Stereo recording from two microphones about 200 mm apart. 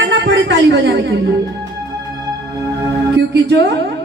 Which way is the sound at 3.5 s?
60° right (ahead or behind).